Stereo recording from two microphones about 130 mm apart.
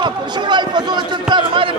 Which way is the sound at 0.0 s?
35° right (ahead or behind).